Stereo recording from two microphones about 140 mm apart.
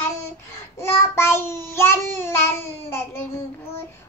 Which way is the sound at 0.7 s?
20° left (ahead or behind).